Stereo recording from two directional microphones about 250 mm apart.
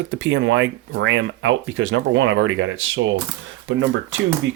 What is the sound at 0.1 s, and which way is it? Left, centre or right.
Speech, right.